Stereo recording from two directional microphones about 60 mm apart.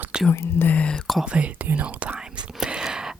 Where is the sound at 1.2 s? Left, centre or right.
Centre.